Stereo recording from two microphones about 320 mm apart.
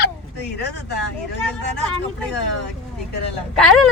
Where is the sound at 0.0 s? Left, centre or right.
Left.